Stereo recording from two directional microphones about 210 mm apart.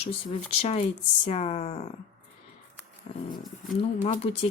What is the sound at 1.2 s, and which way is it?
Speech, 30° left (ahead or behind).